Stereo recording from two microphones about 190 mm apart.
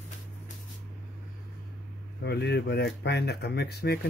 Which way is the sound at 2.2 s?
60° left (ahead or behind).